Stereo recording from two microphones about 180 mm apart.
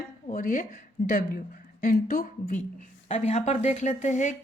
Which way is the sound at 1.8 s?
50° left (ahead or behind).